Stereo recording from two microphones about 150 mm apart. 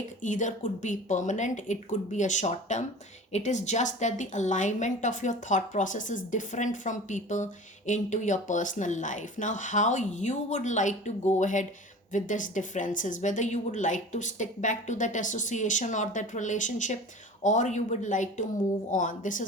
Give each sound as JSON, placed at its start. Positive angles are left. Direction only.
{"t": 0.2, "sound": "a woman's voice", "side_deg": 55}